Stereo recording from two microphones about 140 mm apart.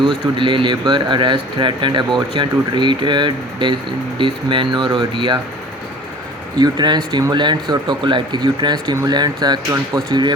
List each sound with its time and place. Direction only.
0.0 s speech: 35° right (ahead or behind)
6.6 s speech: 30° right (ahead or behind)